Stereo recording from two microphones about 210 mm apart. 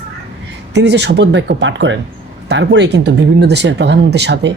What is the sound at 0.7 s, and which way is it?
Speech, 55° right (ahead or behind).